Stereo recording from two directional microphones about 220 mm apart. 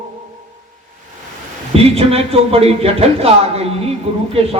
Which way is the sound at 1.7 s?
25° right (ahead or behind).